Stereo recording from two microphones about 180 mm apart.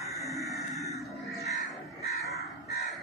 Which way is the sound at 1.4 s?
40° left (ahead or behind).